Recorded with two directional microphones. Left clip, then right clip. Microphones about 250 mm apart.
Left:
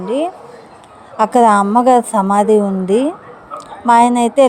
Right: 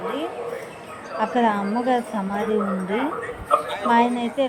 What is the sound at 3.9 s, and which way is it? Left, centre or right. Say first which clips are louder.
Speech: left 10 dB; left.